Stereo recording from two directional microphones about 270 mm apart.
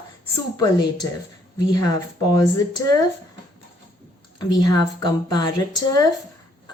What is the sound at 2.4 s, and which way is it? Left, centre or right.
Speech, centre.